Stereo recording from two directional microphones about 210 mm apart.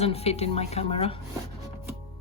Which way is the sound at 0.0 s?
30° left (ahead or behind).